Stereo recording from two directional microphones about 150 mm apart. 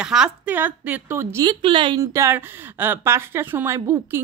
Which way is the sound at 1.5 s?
35° right (ahead or behind).